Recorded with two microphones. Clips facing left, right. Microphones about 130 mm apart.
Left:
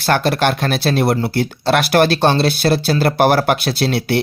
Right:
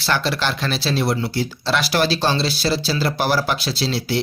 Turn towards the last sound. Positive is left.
turn(degrees=60)  # may be behind; listen again after turning